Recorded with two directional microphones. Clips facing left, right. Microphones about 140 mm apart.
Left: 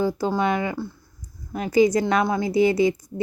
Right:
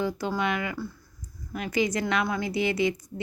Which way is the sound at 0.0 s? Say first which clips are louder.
Left 5 dB; 35° left (ahead or behind).